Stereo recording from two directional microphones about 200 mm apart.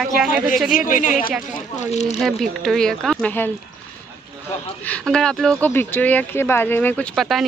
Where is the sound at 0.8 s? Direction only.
40° left (ahead or behind).